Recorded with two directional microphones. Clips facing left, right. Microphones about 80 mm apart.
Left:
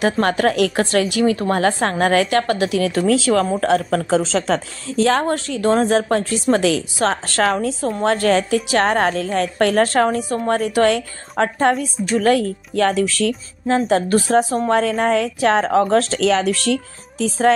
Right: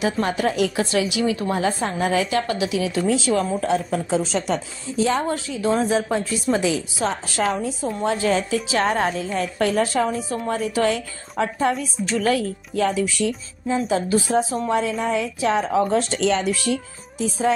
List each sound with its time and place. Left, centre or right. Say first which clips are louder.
0.0 s a woman's voice: left 5 dB; left
1.6 s a woman's voice: left 5 dB; left
13.7 s a woman's voice: left 4 dB; left